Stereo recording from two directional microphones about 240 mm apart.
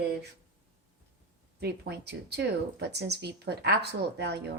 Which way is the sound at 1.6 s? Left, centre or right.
Right.